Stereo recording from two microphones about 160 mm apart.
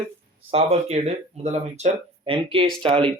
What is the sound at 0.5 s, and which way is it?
Speech, 40° right (ahead or behind).